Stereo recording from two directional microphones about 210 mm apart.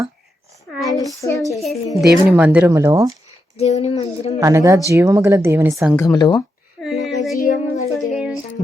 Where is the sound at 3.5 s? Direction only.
30° left (ahead or behind).